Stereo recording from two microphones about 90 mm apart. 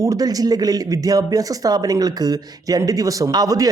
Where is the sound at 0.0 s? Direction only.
40° right (ahead or behind).